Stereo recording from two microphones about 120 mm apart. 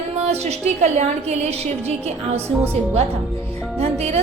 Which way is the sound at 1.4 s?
60° right (ahead or behind).